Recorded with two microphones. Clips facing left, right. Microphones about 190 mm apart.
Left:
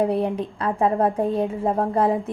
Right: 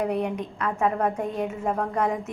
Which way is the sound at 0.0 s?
30° left (ahead or behind).